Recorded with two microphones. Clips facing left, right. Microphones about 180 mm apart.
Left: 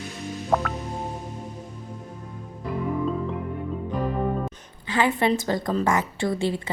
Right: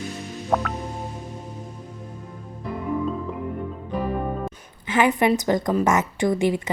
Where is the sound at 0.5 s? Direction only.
5° left (ahead or behind).